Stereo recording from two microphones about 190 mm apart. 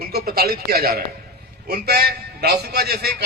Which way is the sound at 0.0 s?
55° right (ahead or behind).